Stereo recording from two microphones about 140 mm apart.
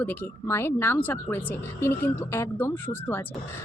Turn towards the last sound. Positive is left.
turn(degrees=15)  # may be behind; listen again after turning